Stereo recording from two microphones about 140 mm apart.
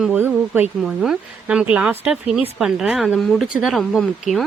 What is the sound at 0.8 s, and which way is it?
Speech, 5° right (ahead or behind).